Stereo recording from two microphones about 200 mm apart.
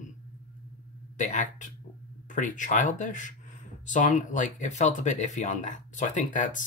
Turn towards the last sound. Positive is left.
turn(degrees=40)  # may be behind; listen again after turning